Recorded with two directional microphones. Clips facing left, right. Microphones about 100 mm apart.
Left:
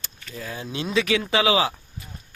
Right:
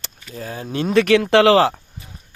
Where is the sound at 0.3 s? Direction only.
35° right (ahead or behind); by 1.8 s 70° right (ahead or behind).